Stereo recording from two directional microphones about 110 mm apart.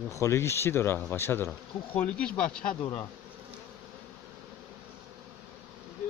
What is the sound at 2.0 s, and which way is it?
Speech, 10° left (ahead or behind).